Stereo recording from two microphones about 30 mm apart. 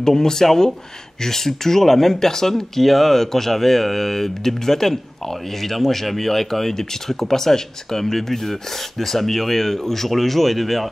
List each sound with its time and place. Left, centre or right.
0.0 s speech: centre